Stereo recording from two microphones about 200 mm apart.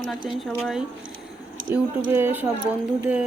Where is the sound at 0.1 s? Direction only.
Centre (ahead or behind).